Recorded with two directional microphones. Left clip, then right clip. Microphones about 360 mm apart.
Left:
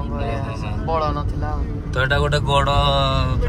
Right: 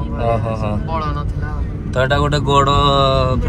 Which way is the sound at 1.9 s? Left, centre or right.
Centre.